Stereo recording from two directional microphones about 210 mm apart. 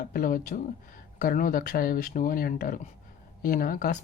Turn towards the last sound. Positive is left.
turn(degrees=40)  # may be behind; listen again after turning